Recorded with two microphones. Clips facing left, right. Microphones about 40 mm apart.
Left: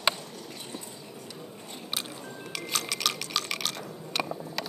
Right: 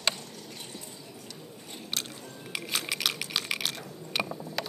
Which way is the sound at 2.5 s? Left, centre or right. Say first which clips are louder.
Even; centre.